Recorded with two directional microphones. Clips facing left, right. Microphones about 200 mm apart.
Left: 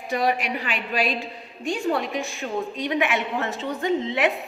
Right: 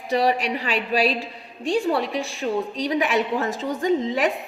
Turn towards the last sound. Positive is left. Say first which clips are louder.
# right 2 dB
turn(degrees=-35)  # may be behind; listen again after turning